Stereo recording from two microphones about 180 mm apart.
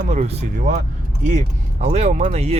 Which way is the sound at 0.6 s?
50° right (ahead or behind).